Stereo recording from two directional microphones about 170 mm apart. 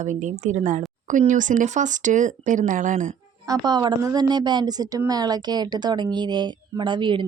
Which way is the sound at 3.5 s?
25° right (ahead or behind).